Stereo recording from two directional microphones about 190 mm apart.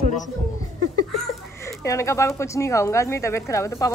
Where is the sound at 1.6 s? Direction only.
15° left (ahead or behind).